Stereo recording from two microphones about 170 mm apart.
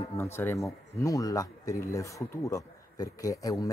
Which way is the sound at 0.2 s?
15° left (ahead or behind).